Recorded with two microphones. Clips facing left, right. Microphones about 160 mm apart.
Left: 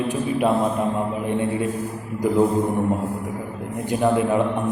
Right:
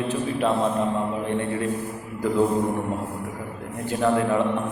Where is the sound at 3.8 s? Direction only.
15° left (ahead or behind).